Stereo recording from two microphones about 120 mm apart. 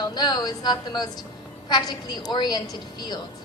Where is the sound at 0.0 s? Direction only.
35° left (ahead or behind).